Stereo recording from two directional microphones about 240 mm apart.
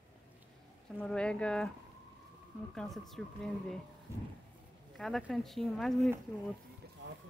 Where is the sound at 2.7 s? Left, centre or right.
Centre.